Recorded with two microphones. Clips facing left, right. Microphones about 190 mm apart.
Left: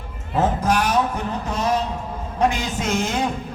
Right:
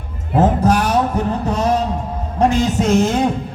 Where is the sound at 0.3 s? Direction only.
40° right (ahead or behind).